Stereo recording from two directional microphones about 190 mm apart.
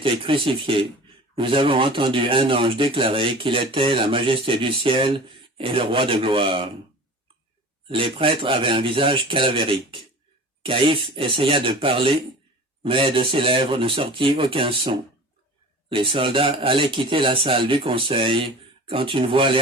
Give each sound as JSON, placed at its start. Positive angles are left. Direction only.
{"t": 0.0, "sound": "speech", "side_deg": -30}
{"t": 7.9, "sound": "speech", "side_deg": -25}